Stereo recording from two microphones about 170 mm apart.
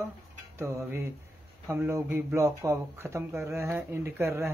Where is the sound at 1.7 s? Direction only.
15° right (ahead or behind).